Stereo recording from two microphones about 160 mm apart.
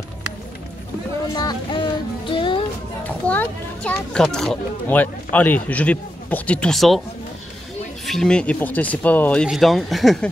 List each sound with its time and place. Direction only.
1.3 s music: 25° left (ahead or behind)
3.0 s a child's voice: 10° left (ahead or behind)
8.1 s a child's voice: 5° left (ahead or behind)